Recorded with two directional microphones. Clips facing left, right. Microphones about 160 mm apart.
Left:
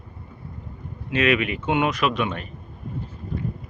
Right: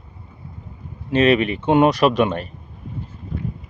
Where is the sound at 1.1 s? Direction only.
30° right (ahead or behind).